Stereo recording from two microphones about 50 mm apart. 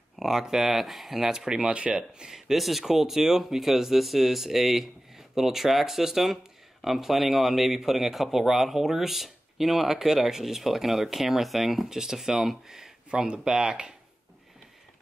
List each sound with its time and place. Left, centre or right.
0.2 s speech: centre